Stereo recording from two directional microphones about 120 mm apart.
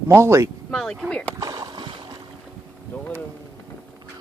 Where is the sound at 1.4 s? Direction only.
30° right (ahead or behind).